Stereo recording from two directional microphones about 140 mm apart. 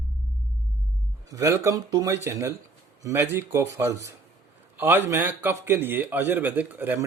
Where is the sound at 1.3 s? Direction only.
20° right (ahead or behind).